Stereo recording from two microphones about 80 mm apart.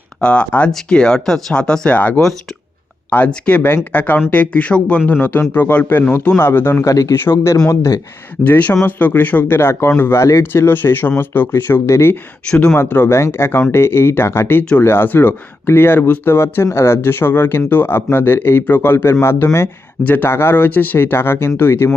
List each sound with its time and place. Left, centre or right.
0.2 s speech: centre
5.1 s speech: left
6.8 s speech: left
7.1 s speech: left
8.4 s speech: centre
12.5 s speech: centre
12.7 s speech: left
19.6 s speech: left